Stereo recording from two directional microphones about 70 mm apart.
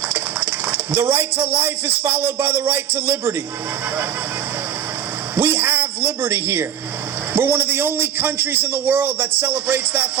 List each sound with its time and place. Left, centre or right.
0.1 s speech: right
5.4 s a sound: right
7.3 s a man's voice: right